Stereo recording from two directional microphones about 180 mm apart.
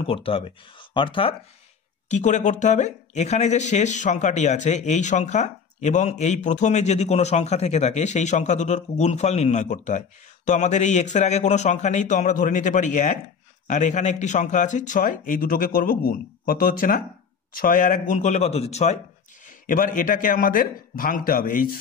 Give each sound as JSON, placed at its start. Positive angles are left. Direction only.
{"t": 0.0, "sound": "speech", "side_deg": 30}
{"t": 2.0, "sound": "a man's voice", "side_deg": 40}
{"t": 19.6, "sound": "a man's voice", "side_deg": 50}